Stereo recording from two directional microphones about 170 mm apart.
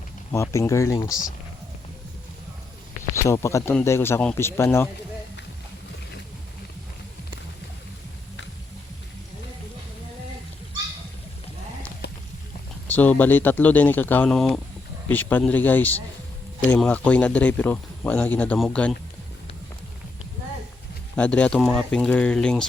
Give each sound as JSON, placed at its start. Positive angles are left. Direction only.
{"t": 0.3, "sound": "speech", "side_deg": 15}
{"t": 3.2, "sound": "speech", "side_deg": 15}
{"t": 12.0, "sound": "a sound", "side_deg": 85}
{"t": 12.9, "sound": "speech", "side_deg": 10}
{"t": 21.2, "sound": "speech", "side_deg": 5}